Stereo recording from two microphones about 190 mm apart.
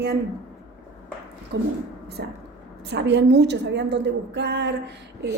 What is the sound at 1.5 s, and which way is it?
A woman's voice, 65° right (ahead or behind).